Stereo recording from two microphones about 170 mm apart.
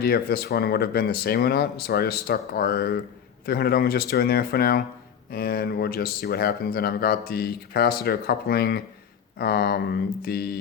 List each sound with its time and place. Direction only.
0.0 s speech: 65° left (ahead or behind)